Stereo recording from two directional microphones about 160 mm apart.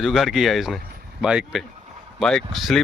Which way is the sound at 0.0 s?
Centre (ahead or behind).